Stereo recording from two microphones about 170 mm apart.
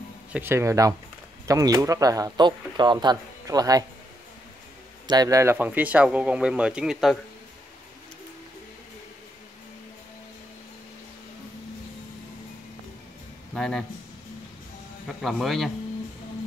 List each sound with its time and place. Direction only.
0.3 s speech: 15° right (ahead or behind)
5.0 s speech: 25° right (ahead or behind); by 7.2 s 5° right (ahead or behind)
13.6 s speech: centre (ahead or behind)
15.0 s speech: centre (ahead or behind)